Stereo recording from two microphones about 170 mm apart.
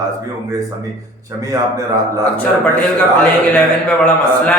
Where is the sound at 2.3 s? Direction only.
10° left (ahead or behind).